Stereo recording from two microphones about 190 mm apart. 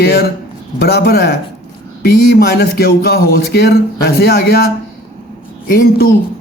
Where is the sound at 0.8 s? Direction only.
55° left (ahead or behind).